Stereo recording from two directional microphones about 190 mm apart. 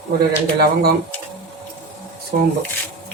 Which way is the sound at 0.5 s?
55° right (ahead or behind).